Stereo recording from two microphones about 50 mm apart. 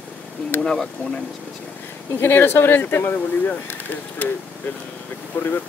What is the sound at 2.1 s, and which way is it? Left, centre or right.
Speech, left.